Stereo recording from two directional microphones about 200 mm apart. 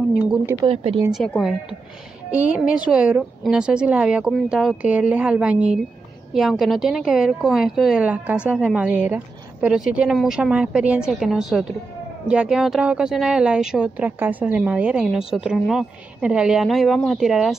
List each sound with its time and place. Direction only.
0.2 s speech: 10° right (ahead or behind)
0.6 s speech: 25° right (ahead or behind)
1.1 s speech: centre (ahead or behind)